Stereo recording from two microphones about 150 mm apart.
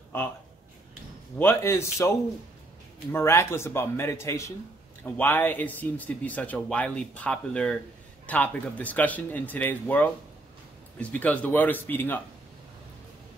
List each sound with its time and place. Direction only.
1.4 s speech: 15° left (ahead or behind)